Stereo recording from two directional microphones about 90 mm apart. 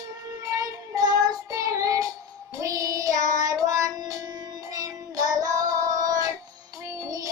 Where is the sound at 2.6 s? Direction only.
40° right (ahead or behind).